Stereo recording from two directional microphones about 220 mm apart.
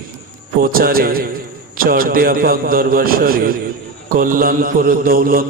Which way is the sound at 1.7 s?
40° right (ahead or behind).